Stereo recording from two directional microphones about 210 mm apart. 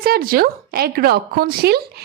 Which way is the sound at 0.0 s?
45° right (ahead or behind).